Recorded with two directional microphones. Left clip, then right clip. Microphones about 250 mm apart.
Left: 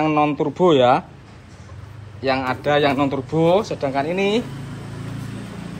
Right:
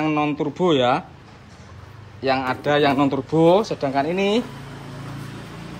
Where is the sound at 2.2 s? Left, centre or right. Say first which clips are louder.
Even; centre.